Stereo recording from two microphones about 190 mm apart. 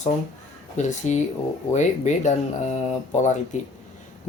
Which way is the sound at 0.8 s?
40° left (ahead or behind).